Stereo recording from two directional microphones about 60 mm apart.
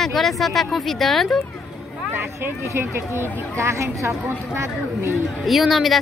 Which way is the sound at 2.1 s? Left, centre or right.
Right.